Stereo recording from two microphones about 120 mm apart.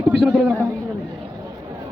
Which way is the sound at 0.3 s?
5° right (ahead or behind).